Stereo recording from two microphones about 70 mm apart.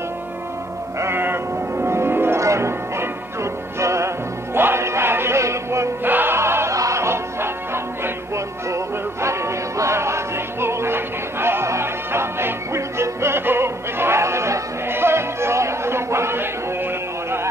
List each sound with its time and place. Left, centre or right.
0.9 s music: right
2.4 s change ringing: right
3.8 s music: right
6.0 s music: right